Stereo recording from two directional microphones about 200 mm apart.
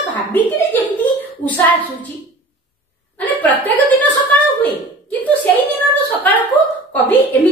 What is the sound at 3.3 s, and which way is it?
Speech, 10° left (ahead or behind).